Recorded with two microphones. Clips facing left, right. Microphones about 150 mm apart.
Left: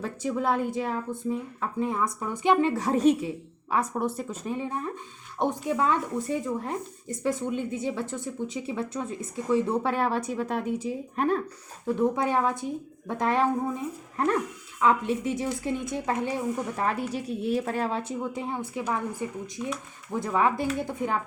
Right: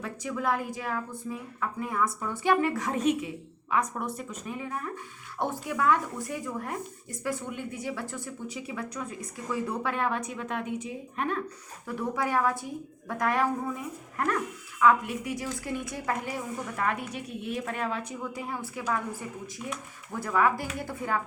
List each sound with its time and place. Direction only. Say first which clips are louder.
0.0 s a woman's voice: left 3 dB; 30° left (ahead or behind)
11.9 s a woman's voice: left 5 dB; 25° left (ahead or behind)
20.1 s a woman's voice: left 1 dB; 25° left (ahead or behind)